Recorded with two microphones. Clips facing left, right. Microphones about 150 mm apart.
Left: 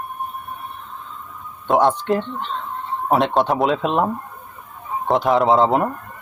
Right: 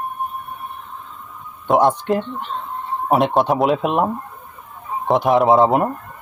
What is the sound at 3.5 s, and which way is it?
Speech, centre (ahead or behind).